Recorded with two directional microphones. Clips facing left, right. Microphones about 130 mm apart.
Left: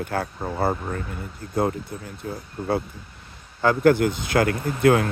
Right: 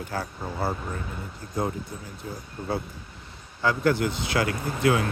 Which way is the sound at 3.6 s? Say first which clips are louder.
Left 6 dB; 55° left (ahead or behind).